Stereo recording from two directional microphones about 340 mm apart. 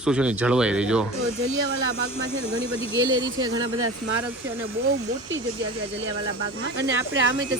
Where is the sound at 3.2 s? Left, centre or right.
Right.